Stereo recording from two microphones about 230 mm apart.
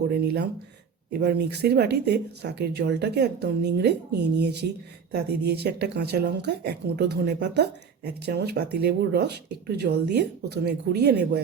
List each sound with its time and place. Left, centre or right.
0.1 s speech: right